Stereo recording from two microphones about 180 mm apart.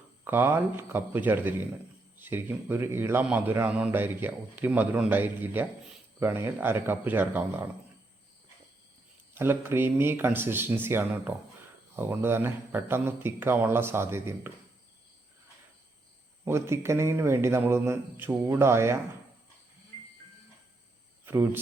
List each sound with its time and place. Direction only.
0.3 s a man's voice: 10° right (ahead or behind)
9.3 s a man's voice: 10° right (ahead or behind)
16.4 s a man's voice: 15° right (ahead or behind)
21.2 s a man's voice: 10° right (ahead or behind)